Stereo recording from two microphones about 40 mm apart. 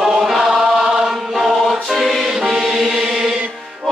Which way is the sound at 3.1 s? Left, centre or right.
Centre.